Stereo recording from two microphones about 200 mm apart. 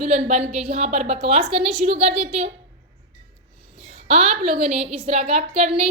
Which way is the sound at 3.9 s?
30° right (ahead or behind).